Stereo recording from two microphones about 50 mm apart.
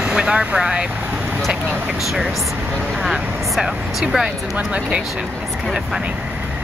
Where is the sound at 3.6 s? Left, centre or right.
Centre.